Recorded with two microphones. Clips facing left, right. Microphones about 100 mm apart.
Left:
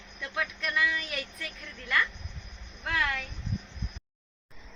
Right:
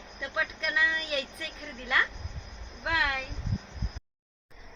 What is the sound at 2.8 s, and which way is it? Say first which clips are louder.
Speech: right 1 dB; 15° right (ahead or behind).